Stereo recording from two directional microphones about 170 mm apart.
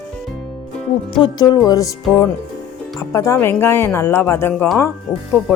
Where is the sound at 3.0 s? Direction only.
20° left (ahead or behind).